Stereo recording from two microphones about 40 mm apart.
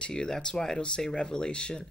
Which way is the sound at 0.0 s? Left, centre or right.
Centre.